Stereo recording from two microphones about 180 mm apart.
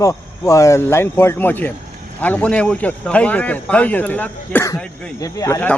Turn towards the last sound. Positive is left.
turn(degrees=15)  # may be behind; listen again after turning